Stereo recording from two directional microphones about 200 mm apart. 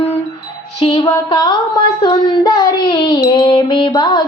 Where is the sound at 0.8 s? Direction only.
20° left (ahead or behind).